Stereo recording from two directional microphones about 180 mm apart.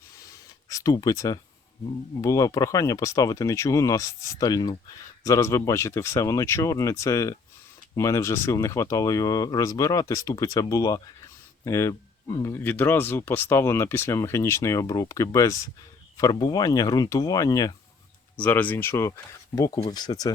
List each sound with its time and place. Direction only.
0.2 s a sound: 20° left (ahead or behind)
2.2 s speech: 20° left (ahead or behind)
18.3 s speech: 10° left (ahead or behind)